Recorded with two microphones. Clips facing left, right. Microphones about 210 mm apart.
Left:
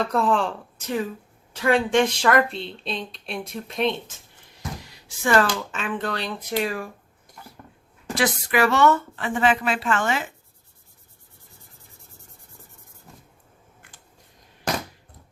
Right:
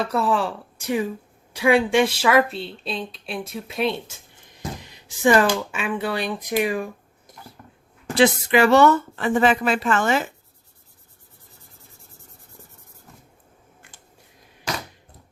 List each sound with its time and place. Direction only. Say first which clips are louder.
0.0 s a woman's voice: even; 5° right (ahead or behind)
4.8 s speech: right 10 dB; 20° right (ahead or behind)
8.1 s speech: right 6 dB; 25° right (ahead or behind)